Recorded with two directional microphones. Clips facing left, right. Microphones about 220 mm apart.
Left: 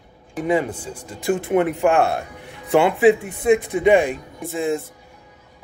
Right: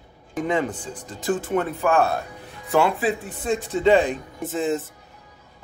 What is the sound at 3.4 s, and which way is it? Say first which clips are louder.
Speech: left 8 dB; 60° left (ahead or behind).